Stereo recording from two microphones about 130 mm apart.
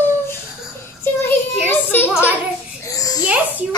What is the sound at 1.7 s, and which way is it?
Music, 15° left (ahead or behind).